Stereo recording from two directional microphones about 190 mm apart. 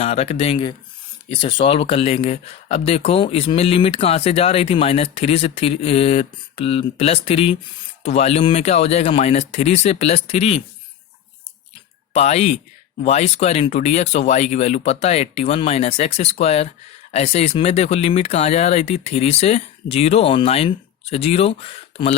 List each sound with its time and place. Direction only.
0.0 s speech: 35° left (ahead or behind)
12.1 s speech: 35° left (ahead or behind)